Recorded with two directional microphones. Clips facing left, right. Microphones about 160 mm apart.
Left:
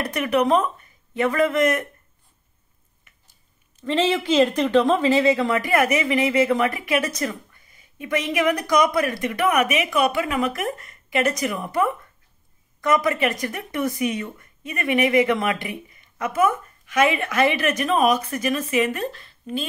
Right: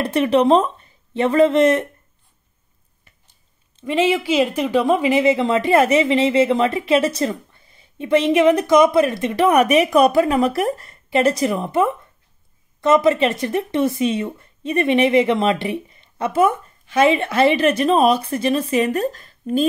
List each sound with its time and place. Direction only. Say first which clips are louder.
0.0 s speech: right 5 dB; 30° right (ahead or behind)
3.8 s speech: right 3 dB; 10° right (ahead or behind); by 19.6 s 45° right (ahead or behind)